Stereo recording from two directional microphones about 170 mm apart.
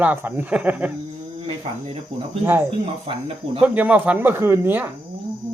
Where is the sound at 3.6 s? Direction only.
10° right (ahead or behind).